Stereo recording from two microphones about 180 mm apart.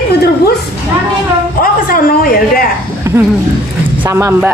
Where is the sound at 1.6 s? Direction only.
55° left (ahead or behind).